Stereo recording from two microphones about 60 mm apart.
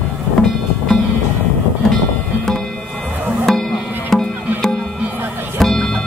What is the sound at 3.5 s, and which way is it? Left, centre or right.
Music, centre.